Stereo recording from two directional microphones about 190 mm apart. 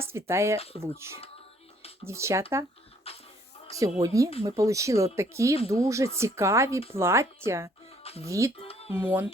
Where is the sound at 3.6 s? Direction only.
30° left (ahead or behind).